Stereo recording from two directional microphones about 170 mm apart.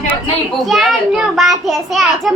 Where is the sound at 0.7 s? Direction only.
Centre (ahead or behind).